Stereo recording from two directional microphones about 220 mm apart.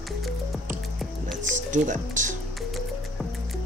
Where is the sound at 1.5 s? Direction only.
35° right (ahead or behind).